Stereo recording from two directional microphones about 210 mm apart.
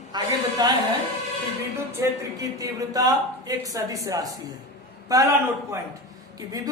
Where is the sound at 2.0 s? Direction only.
15° right (ahead or behind).